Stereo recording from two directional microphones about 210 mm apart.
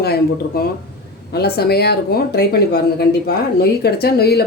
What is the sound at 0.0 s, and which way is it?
Speech, 50° left (ahead or behind).